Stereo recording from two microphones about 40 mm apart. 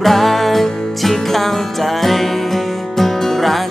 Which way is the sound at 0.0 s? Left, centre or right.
Centre.